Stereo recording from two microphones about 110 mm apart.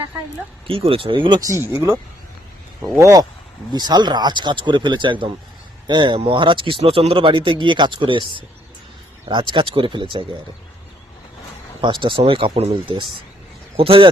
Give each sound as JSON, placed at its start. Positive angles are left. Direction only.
{"t": 0.7, "sound": "speech", "side_deg": -60}
{"t": 1.4, "sound": "speech", "side_deg": -30}
{"t": 3.7, "sound": "speech", "side_deg": -40}
{"t": 11.8, "sound": "speech", "side_deg": -45}